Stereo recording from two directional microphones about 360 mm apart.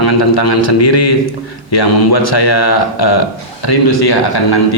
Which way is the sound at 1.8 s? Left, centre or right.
Left.